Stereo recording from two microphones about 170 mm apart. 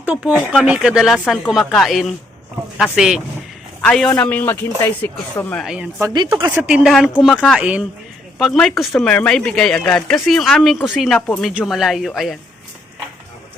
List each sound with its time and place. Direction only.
0.5 s speech: 5° right (ahead or behind)
6.0 s speech: 20° right (ahead or behind)
6.6 s speech: 5° right (ahead or behind)